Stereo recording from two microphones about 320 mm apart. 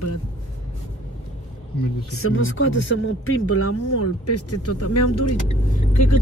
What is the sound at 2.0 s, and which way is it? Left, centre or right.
Speech, left.